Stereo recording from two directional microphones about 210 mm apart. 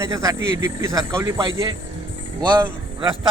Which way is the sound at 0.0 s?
15° right (ahead or behind).